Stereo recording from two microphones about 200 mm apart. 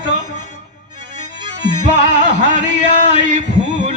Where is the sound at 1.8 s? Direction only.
35° right (ahead or behind).